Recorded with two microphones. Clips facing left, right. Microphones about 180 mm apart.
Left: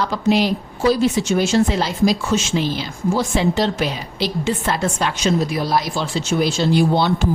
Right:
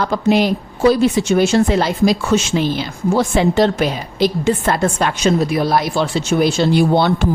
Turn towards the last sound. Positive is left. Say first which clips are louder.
# right 3 dB
turn(degrees=-60)  # may be behind; listen again after turning